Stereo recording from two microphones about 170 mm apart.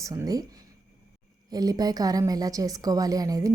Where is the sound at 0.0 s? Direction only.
20° right (ahead or behind).